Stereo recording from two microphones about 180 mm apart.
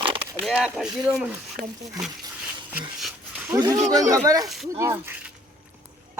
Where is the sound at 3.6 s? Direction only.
20° right (ahead or behind).